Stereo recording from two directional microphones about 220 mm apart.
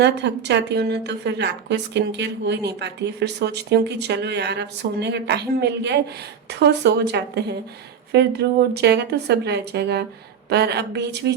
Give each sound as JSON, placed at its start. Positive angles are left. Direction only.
{"t": 0.0, "sound": "a woman's voice", "side_deg": -50}